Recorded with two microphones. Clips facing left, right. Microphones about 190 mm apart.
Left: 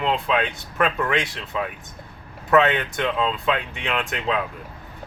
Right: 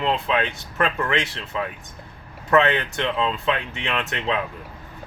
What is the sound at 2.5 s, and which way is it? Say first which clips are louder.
Speech: left 1 dB; centre (ahead or behind).